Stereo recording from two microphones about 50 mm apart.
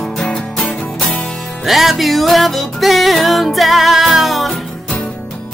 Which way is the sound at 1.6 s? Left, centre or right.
Centre.